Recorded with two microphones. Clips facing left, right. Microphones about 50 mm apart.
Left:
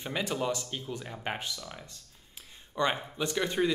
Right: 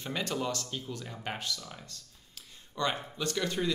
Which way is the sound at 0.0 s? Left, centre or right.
Centre.